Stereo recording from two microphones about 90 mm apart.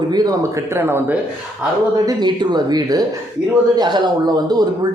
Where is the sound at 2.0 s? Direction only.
55° right (ahead or behind).